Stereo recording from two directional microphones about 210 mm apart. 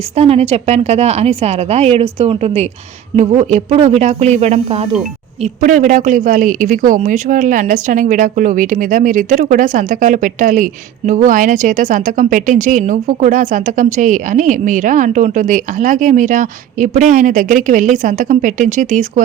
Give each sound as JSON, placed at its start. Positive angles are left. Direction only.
{"t": 0.2, "sound": "a woman's voice", "side_deg": -30}